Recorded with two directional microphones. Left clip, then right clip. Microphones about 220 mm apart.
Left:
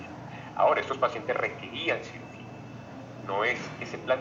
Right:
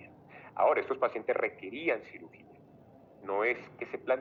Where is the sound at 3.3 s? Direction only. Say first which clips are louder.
Left 3 dB; 35° right (ahead or behind).